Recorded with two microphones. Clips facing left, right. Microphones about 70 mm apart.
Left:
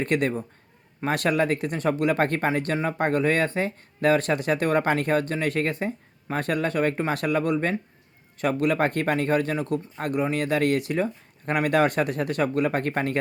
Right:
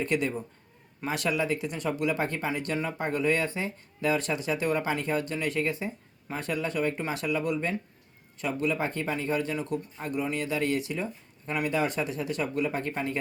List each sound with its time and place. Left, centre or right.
0.0 s speech: left